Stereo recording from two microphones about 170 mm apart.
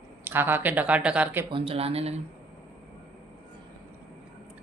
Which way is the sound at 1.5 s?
30° right (ahead or behind).